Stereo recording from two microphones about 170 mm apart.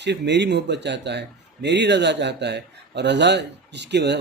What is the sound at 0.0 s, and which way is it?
Speech, 90° right.